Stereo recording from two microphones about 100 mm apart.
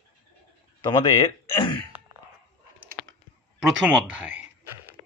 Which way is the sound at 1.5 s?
55° left (ahead or behind).